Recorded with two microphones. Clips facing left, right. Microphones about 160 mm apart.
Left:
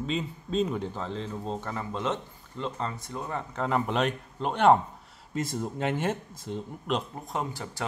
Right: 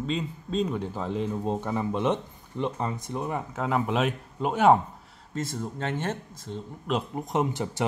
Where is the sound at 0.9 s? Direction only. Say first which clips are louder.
Right 5 dB; 10° right (ahead or behind).